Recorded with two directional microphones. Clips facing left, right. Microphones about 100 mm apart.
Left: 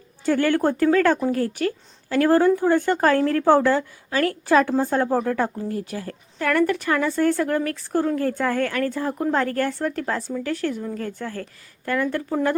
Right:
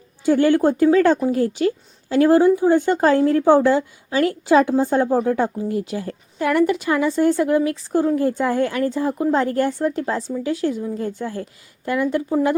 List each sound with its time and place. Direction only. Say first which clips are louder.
0.3 s a woman's voice: right 4 dB; 15° right (ahead or behind)